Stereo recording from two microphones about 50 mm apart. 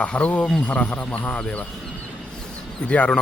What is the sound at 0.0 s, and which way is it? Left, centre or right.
Speech, left.